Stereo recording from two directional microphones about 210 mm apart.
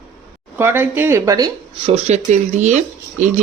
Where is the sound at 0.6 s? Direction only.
10° right (ahead or behind).